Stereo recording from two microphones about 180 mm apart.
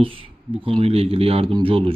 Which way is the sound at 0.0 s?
30° right (ahead or behind).